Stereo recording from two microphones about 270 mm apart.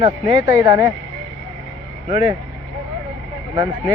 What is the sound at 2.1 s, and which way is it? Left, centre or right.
Speech, left.